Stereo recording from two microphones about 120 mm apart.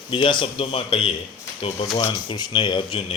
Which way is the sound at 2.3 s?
40° left (ahead or behind).